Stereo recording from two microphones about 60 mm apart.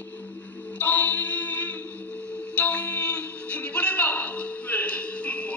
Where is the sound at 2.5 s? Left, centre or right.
Left.